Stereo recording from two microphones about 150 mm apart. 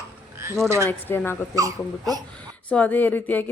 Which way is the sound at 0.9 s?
15° left (ahead or behind).